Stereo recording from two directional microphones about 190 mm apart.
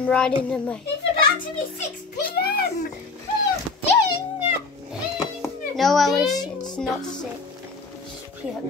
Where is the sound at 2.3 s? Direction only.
55° left (ahead or behind).